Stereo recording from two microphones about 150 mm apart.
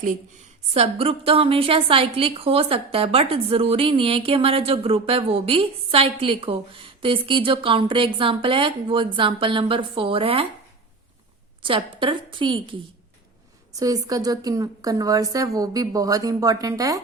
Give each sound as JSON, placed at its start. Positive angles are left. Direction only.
{"t": 0.7, "sound": "a woman's voice", "side_deg": -40}
{"t": 11.6, "sound": "a woman's voice", "side_deg": -35}
{"t": 13.7, "sound": "a woman's voice", "side_deg": -25}